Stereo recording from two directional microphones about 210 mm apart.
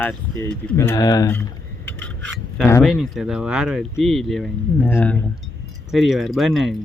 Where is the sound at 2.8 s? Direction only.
Centre (ahead or behind).